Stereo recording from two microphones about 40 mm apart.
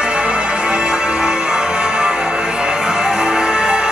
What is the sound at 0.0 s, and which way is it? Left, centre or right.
Music, right.